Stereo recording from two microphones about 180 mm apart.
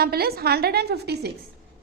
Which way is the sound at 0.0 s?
60° right (ahead or behind).